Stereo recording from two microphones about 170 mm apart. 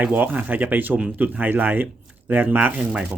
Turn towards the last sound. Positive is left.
turn(degrees=-5)  # may be behind; listen again after turning